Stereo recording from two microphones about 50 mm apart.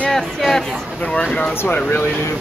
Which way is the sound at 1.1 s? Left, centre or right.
Centre.